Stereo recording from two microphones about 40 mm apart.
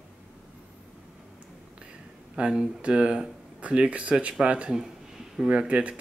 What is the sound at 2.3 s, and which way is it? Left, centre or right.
Speech, right.